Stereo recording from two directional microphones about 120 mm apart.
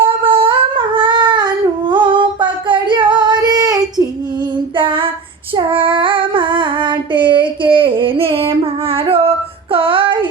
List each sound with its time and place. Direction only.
0.0 s humming: 45° right (ahead or behind)
4.8 s female singing: 45° right (ahead or behind)
5.5 s child singing: 45° right (ahead or behind)
9.7 s music: 45° right (ahead or behind)